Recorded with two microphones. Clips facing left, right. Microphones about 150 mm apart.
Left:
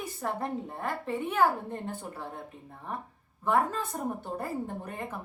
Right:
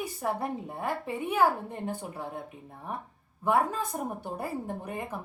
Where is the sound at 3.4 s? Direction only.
10° right (ahead or behind).